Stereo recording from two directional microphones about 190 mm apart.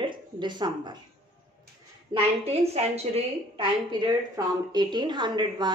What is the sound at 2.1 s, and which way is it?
A woman's voice, 30° right (ahead or behind).